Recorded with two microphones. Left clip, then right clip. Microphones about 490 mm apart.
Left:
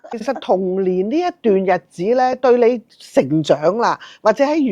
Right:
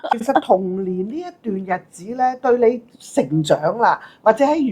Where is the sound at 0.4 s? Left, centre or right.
Left.